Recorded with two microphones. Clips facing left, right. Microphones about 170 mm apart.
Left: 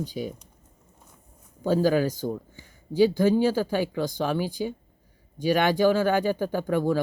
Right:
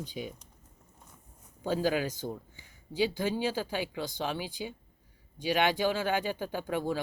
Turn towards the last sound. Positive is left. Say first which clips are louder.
# left 7 dB
turn(degrees=45)  # may be behind; listen again after turning